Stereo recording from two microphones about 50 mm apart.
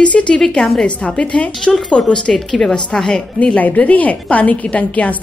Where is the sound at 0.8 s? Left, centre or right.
Centre.